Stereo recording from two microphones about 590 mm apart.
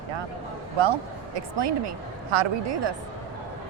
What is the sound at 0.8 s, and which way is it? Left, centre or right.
Speech, right.